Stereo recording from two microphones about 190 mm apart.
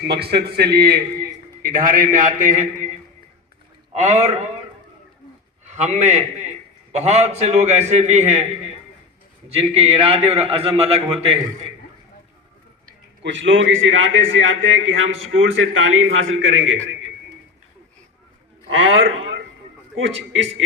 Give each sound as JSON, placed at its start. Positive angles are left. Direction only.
{"t": 0.1, "sound": "a man's voice", "side_deg": -55}
{"t": 3.9, "sound": "a man's voice", "side_deg": -35}
{"t": 5.6, "sound": "a man's voice", "side_deg": -35}
{"t": 9.5, "sound": "a man's voice", "side_deg": -30}
{"t": 13.2, "sound": "a man's voice", "side_deg": -75}
{"t": 18.7, "sound": "a man's voice", "side_deg": -90}